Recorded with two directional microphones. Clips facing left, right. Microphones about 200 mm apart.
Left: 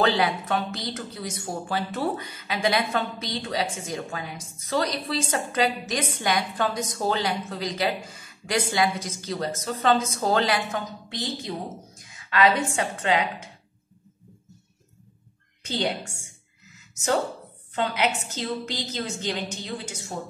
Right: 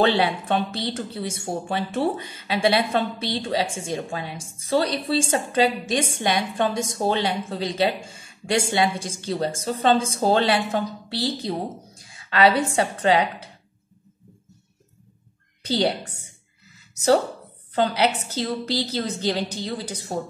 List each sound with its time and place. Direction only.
0.0 s speech: 30° right (ahead or behind)
15.6 s a woman's voice: 35° right (ahead or behind)
17.7 s a woman's voice: 35° right (ahead or behind)